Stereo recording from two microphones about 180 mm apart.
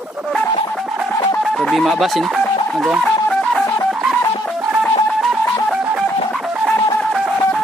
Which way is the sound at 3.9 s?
5° right (ahead or behind).